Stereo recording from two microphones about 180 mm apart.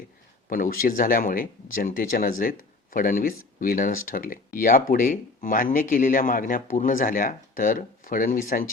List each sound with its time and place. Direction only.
0.5 s speech: 50° left (ahead or behind)